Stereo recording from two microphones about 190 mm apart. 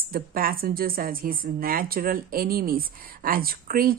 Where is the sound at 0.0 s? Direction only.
50° right (ahead or behind).